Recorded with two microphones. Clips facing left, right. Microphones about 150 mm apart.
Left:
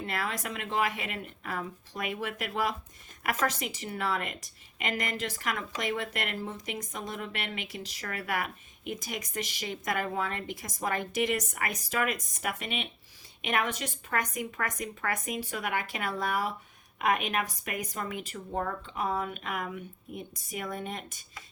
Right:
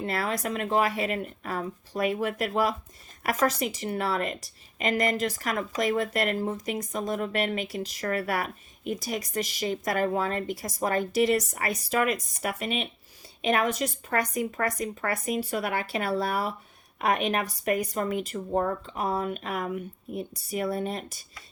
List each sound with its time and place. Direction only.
0.0 s speech: 35° right (ahead or behind)